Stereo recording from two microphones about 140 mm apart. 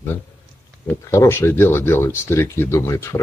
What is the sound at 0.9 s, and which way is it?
Speech, 20° left (ahead or behind).